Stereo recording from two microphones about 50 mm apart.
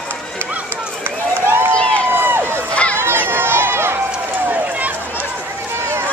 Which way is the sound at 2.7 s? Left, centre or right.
Left.